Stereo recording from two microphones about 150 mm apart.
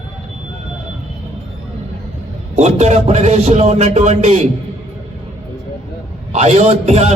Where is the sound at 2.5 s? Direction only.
50° right (ahead or behind).